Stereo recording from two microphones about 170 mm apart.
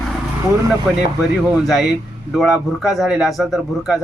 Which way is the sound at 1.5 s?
Centre (ahead or behind).